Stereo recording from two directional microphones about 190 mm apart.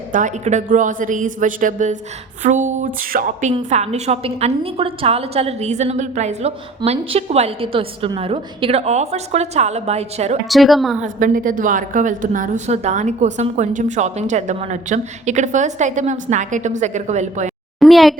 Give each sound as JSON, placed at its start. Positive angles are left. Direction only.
{"t": 0.1, "sound": "a woman's voice", "side_deg": -40}
{"t": 10.5, "sound": "a woman's voice", "side_deg": 0}
{"t": 11.0, "sound": "a woman's voice", "side_deg": -45}
{"t": 17.7, "sound": "a sound", "side_deg": 0}